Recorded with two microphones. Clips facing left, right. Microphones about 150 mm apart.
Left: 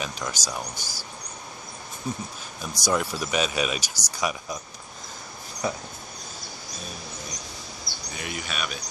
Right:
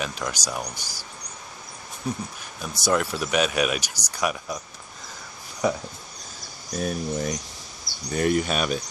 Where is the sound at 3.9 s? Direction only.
10° left (ahead or behind).